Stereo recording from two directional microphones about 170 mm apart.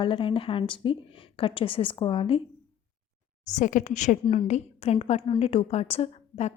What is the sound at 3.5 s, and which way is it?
A woman's voice, 45° left (ahead or behind).